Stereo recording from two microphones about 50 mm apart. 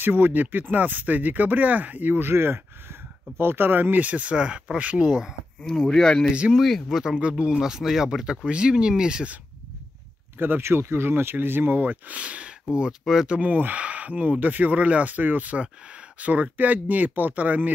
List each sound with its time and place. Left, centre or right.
0.0 s speech: right
4.0 s speech: right
5.6 s speech: centre
6.5 s speech: centre
7.0 s speech: centre
7.5 s speech: centre
10.4 s speech: right
13.0 s speech: centre
13.3 s speech: right